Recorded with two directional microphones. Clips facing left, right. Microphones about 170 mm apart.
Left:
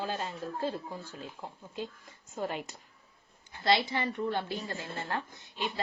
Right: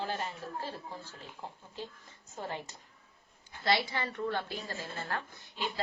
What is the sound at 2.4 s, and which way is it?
A woman's voice, 15° left (ahead or behind).